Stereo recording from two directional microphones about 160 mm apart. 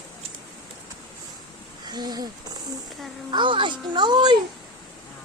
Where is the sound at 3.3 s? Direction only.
30° right (ahead or behind).